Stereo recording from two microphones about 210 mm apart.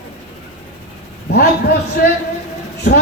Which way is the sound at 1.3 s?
50° left (ahead or behind).